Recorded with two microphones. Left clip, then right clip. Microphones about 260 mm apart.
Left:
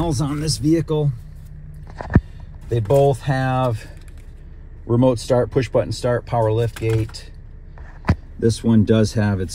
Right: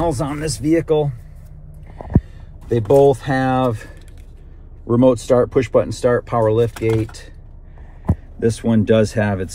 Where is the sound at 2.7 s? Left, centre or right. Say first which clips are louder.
Right 4 dB; centre.